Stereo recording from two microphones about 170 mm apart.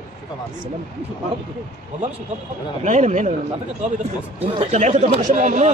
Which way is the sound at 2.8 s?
45° right (ahead or behind).